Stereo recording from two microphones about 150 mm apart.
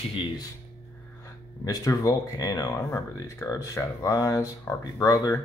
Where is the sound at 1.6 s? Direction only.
25° left (ahead or behind).